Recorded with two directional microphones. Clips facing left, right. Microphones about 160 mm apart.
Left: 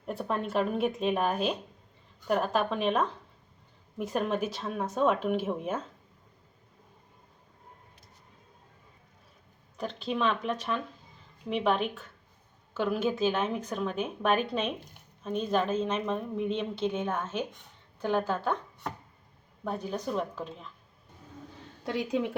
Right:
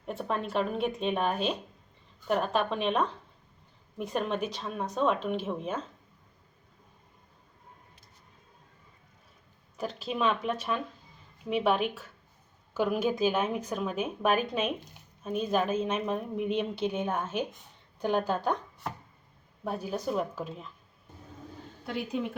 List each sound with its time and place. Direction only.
0.0 s speech: centre (ahead or behind)
9.7 s a woman's voice: 5° right (ahead or behind)
19.6 s speech: 5° right (ahead or behind)
21.8 s a woman's voice: 90° left